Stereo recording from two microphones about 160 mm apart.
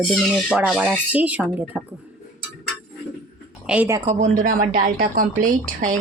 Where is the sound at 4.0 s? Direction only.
45° right (ahead or behind).